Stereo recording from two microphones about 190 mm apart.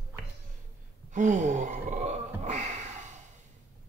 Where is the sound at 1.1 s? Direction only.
40° right (ahead or behind).